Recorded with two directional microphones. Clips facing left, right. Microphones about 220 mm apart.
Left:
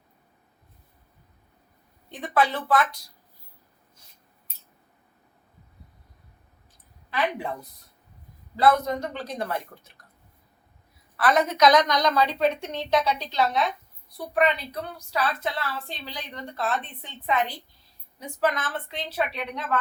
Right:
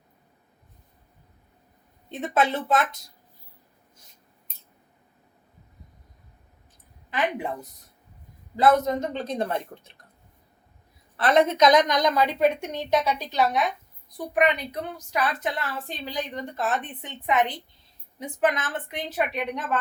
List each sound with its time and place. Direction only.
2.0 s a woman's voice: 20° right (ahead or behind)
7.1 s a woman's voice: 20° right (ahead or behind)
11.2 s a woman's voice: 25° right (ahead or behind)